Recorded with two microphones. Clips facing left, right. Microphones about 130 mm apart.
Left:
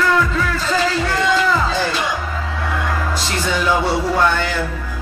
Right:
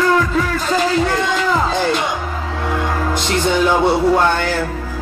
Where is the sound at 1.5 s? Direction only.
20° right (ahead or behind).